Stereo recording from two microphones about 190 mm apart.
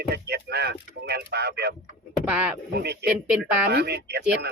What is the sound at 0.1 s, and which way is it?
Speech, 60° right (ahead or behind).